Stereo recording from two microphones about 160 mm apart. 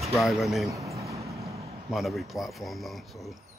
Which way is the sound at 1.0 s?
20° right (ahead or behind).